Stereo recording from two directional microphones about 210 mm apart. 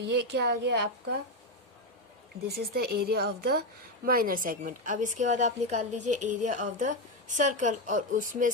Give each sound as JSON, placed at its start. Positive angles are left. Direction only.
{"t": 0.0, "sound": "a woman's voice", "side_deg": -50}
{"t": 2.5, "sound": "a woman's voice", "side_deg": -50}